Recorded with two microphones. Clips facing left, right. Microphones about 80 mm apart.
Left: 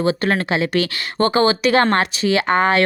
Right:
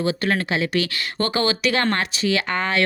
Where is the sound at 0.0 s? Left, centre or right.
Left.